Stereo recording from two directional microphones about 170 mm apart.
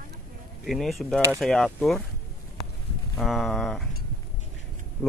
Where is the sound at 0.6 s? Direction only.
Centre (ahead or behind).